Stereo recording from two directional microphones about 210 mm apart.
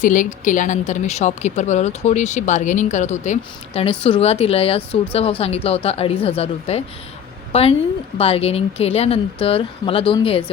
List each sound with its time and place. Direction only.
0.0 s a woman's voice: 40° left (ahead or behind)